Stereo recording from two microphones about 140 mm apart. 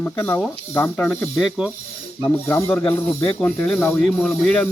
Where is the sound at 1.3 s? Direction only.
5° right (ahead or behind).